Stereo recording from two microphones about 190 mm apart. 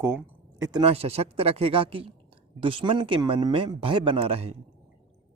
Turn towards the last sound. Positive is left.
turn(degrees=-30)  # may be behind; listen again after turning